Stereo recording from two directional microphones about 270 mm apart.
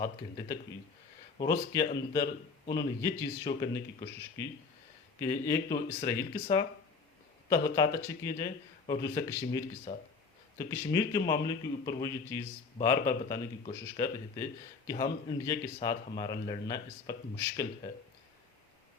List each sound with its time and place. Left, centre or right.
0.0 s speech: centre